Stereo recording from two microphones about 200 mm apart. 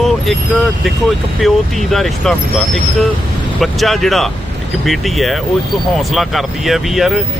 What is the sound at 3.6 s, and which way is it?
Speech, centre (ahead or behind).